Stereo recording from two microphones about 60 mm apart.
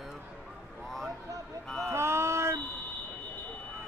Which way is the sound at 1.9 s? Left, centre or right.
Right.